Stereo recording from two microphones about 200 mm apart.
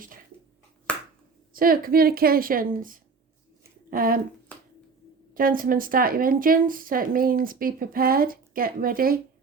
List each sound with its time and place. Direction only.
0.9 s finger snapping: 5° left (ahead or behind)
1.5 s a woman's voice: 45° right (ahead or behind)
5.3 s a woman's voice: 45° right (ahead or behind)